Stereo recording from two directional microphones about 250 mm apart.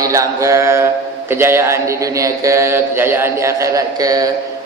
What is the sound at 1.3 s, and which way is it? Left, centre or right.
Speech, centre.